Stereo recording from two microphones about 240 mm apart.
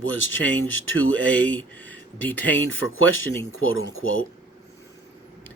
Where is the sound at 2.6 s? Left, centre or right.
Left.